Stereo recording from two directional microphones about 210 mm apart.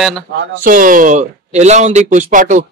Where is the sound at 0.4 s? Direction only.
40° right (ahead or behind).